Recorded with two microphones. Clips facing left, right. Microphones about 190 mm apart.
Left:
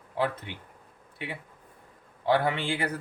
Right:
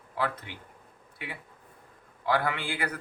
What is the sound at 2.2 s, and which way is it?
Speech, 25° left (ahead or behind).